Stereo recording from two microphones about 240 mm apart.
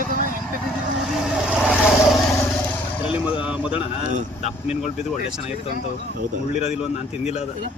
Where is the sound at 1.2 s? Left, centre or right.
Centre.